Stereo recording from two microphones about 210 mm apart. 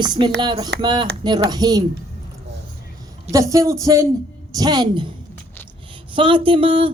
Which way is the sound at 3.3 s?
15° right (ahead or behind).